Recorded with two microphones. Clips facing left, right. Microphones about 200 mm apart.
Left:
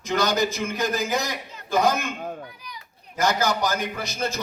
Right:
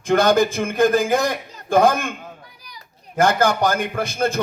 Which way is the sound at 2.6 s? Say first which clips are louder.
Left 3 dB; 35° right (ahead or behind).